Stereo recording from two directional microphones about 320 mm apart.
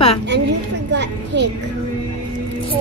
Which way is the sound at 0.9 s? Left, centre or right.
Right.